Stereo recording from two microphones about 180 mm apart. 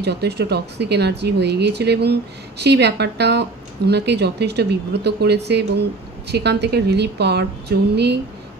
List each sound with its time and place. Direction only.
0.0 s speech: 65° right (ahead or behind)